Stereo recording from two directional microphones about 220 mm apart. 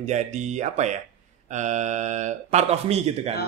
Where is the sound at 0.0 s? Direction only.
30° right (ahead or behind).